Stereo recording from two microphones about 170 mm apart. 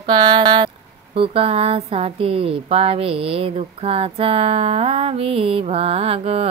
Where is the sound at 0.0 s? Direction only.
30° right (ahead or behind).